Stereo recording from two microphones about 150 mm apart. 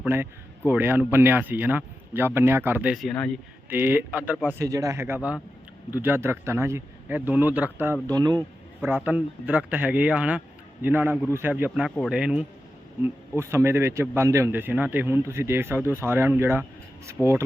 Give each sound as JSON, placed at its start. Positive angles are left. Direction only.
{"t": 0.0, "sound": "speech", "side_deg": -15}
{"t": 2.9, "sound": "speech", "side_deg": 0}
{"t": 3.7, "sound": "speech", "side_deg": -15}
{"t": 8.0, "sound": "speech", "side_deg": -25}
{"t": 8.8, "sound": "speech", "side_deg": -10}
{"t": 13.0, "sound": "speech", "side_deg": -15}
{"t": 17.2, "sound": "speech", "side_deg": 5}